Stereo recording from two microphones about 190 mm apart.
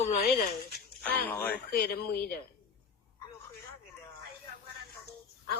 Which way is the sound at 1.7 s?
55° left (ahead or behind).